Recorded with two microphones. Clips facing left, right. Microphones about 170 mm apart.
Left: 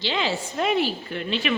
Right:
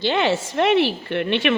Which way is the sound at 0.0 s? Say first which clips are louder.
Right 6 dB; 65° right (ahead or behind).